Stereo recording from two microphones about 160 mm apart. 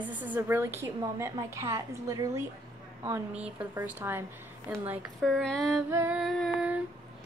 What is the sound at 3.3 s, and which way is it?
A woman's voice, 10° right (ahead or behind).